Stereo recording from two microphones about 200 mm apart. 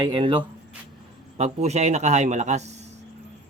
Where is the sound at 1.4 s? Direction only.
35° right (ahead or behind).